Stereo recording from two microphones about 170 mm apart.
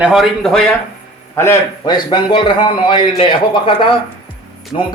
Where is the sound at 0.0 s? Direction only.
Centre (ahead or behind).